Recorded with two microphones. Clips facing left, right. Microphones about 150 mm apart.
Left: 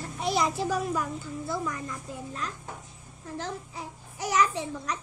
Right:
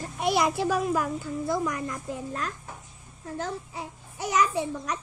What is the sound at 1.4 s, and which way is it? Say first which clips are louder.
A child's voice: right 5 dB; 45° right (ahead or behind).